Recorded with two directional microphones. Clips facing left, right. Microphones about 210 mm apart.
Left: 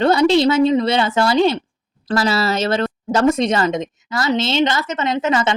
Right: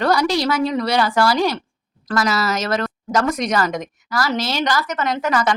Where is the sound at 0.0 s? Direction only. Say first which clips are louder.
Left 5 dB; 25° left (ahead or behind).